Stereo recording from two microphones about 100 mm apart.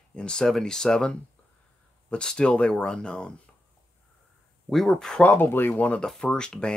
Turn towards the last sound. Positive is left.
turn(degrees=10)  # may be behind; listen again after turning